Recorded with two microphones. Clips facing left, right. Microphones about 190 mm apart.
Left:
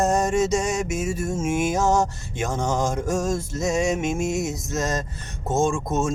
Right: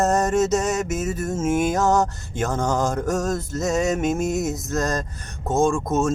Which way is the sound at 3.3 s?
Centre (ahead or behind).